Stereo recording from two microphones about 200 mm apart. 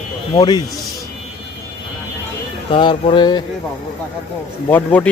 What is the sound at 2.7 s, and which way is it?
Music, 25° left (ahead or behind).